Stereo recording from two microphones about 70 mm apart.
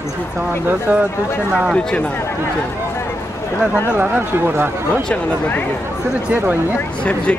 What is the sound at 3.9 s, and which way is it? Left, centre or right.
Speech, right.